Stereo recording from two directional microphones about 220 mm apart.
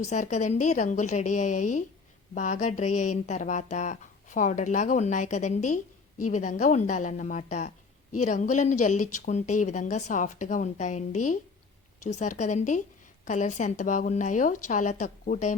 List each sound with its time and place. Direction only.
0.0 s speech: 30° left (ahead or behind)